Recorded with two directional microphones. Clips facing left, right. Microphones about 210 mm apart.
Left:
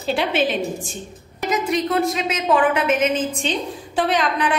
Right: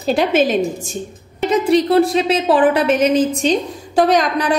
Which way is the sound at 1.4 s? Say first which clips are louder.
Right 7 dB; 30° right (ahead or behind).